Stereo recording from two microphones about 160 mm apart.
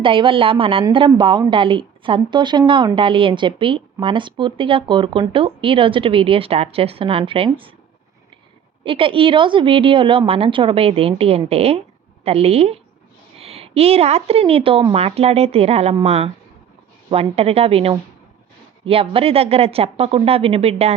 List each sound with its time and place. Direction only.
0.0 s a woman's voice: 35° right (ahead or behind)
8.8 s a woman's voice: 35° right (ahead or behind)